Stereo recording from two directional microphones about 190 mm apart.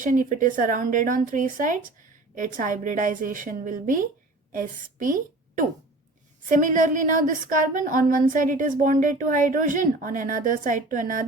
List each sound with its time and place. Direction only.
0.0 s speech: 45° right (ahead or behind)
6.5 s speech: 45° right (ahead or behind)